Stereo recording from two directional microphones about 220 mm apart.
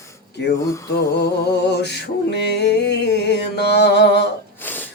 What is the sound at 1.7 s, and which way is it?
Music, 50° left (ahead or behind).